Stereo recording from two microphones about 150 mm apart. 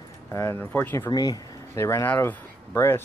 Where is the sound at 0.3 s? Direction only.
20° left (ahead or behind).